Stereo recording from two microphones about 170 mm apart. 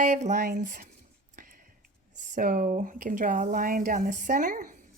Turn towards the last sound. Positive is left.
turn(degrees=-50)  # may be behind; listen again after turning